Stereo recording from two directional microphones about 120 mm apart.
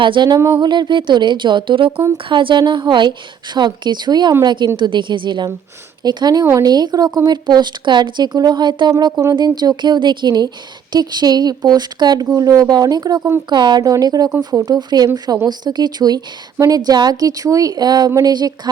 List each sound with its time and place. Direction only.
0.0 s speech: 40° right (ahead or behind)
0.3 s speech: 25° right (ahead or behind)
0.6 s speech: 40° right (ahead or behind)
14.3 s speech: 20° right (ahead or behind)
14.7 s speech: 35° right (ahead or behind)